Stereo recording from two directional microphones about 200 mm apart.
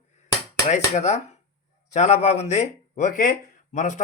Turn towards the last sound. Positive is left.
turn(degrees=35)  # may be behind; listen again after turning